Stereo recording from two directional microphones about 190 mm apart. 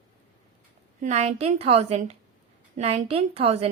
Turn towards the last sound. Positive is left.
turn(degrees=-30)  # may be behind; listen again after turning